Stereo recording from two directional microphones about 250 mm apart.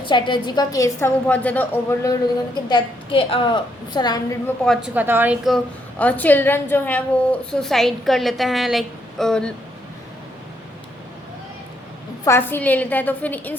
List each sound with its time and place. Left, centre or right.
0.0 s a woman's voice: centre
4.6 s a woman's voice: centre
12.2 s a woman's voice: centre